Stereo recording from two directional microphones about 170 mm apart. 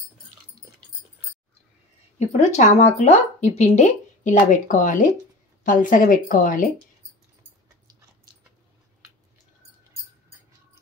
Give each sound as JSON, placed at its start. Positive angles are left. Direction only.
{"t": 2.1, "sound": "speech", "side_deg": 40}